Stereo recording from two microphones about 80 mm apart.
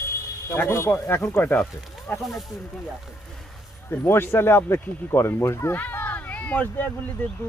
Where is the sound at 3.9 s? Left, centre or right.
Left.